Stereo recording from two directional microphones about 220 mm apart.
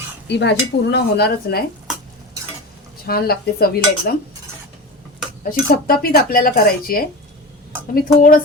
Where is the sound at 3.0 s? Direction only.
45° left (ahead or behind).